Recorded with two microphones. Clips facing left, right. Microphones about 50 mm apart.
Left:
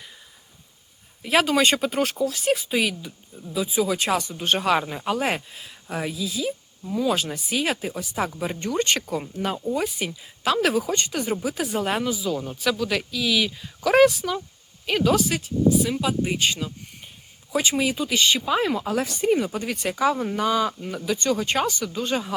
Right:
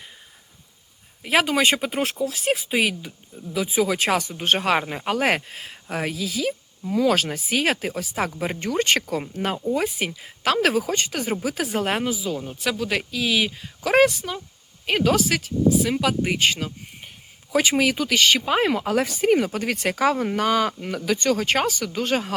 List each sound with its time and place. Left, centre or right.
1.3 s speech: centre
2.4 s speech: right
3.5 s speech: right
11.8 s speech: right
12.4 s speech: centre
12.7 s speech: right
14.2 s speech: centre
14.8 s speech: right
17.7 s speech: right
19.5 s speech: right